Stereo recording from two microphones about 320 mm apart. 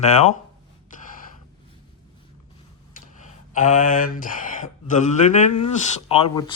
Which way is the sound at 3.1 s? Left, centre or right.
Left.